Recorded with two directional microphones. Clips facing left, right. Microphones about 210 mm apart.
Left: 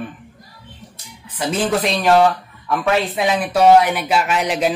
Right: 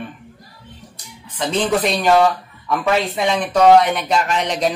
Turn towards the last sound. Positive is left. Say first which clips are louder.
# left 1 dB
turn(degrees=5)  # may be behind; listen again after turning